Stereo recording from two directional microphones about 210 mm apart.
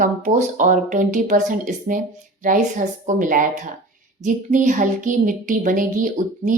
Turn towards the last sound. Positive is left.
turn(degrees=-40)  # may be behind; listen again after turning